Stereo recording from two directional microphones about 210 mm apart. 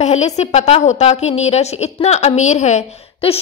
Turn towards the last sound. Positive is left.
turn(degrees=30)  # may be behind; listen again after turning